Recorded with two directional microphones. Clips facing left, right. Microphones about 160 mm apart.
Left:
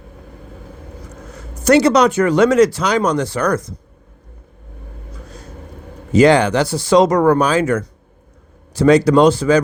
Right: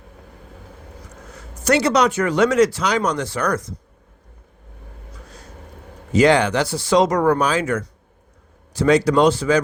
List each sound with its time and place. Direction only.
1.6 s speech: 40° left (ahead or behind)
6.1 s speech: 40° left (ahead or behind)